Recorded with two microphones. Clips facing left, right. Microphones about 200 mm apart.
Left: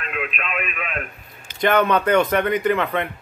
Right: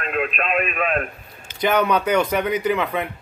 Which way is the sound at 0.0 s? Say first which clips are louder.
Right 5 dB; 40° right (ahead or behind).